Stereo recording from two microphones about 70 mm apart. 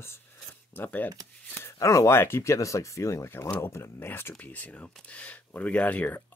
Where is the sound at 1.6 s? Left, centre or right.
Left.